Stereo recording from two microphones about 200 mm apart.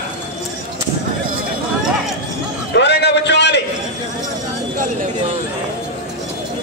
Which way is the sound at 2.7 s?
55° left (ahead or behind).